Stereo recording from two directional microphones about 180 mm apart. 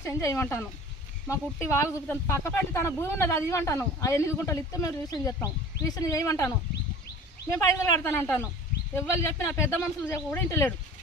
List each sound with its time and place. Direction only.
0.0 s speech: 15° left (ahead or behind)